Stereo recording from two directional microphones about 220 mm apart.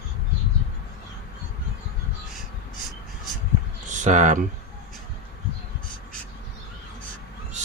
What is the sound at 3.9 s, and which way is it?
Speech, 35° right (ahead or behind).